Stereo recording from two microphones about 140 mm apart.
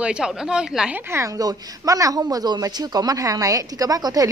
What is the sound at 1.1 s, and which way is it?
A woman's voice, 25° right (ahead or behind).